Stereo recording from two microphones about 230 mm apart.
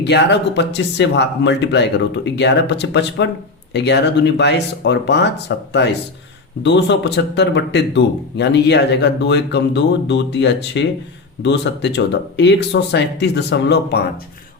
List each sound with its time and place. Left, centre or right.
0.0 s speech: left